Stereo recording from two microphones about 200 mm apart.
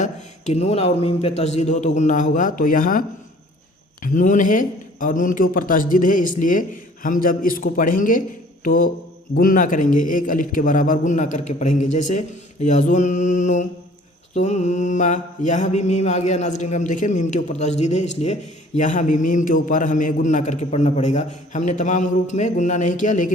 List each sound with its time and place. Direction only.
0.0 s a man's voice: 35° left (ahead or behind)
4.0 s a man's voice: 40° left (ahead or behind)
8.6 s mantra: 45° left (ahead or behind)
9.3 s a man's voice: 45° left (ahead or behind)